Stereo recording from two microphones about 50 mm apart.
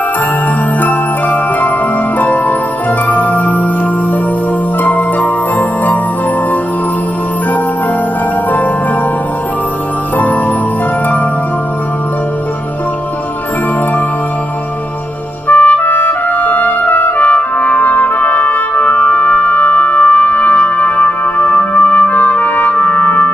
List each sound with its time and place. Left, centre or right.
0.7 s jingle bell: left
2.1 s music: left
4.8 s music: left
15.4 s music: left